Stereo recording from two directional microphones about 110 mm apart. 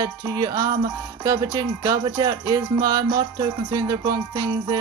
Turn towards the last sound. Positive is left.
turn(degrees=-40)  # may be behind; listen again after turning